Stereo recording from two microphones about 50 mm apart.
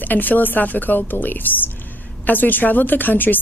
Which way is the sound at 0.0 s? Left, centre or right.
Left.